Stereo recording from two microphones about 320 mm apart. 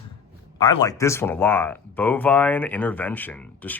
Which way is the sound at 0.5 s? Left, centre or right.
Centre.